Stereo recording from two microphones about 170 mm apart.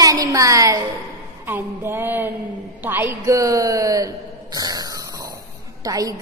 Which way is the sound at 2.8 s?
10° right (ahead or behind).